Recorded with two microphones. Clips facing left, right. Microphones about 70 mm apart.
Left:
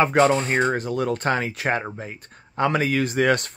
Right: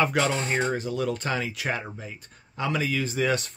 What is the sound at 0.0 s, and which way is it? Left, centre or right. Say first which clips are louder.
Speech: left 6 dB; left.